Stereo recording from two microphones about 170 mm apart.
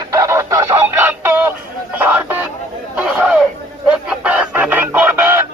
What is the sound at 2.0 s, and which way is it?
Music, 10° right (ahead or behind).